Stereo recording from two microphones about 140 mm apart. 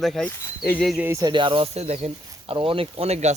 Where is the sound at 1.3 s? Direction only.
35° right (ahead or behind); by 3.3 s 50° right (ahead or behind).